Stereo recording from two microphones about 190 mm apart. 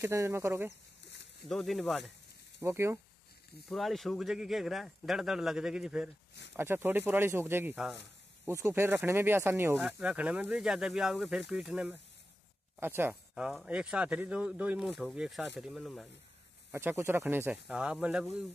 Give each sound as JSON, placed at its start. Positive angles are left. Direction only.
{"t": 0.0, "sound": "speech", "side_deg": -15}
{"t": 1.0, "sound": "a sound", "side_deg": 70}
{"t": 1.5, "sound": "speech", "side_deg": 0}
{"t": 2.6, "sound": "speech", "side_deg": -15}
{"t": 3.6, "sound": "speech", "side_deg": 0}
{"t": 16.7, "sound": "speech", "side_deg": -15}